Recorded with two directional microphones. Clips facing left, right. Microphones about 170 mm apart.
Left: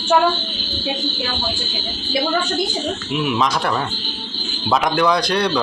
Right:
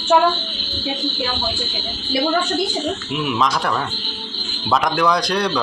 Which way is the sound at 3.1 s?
Centre (ahead or behind).